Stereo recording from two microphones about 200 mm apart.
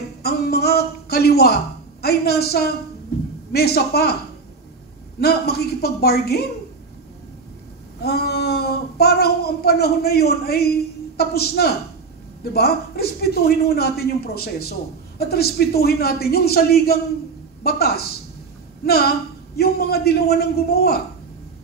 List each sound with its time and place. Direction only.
0.2 s a man's voice: 50° left (ahead or behind)
5.2 s a man's voice: 50° left (ahead or behind)
8.0 s a man's voice: 50° left (ahead or behind)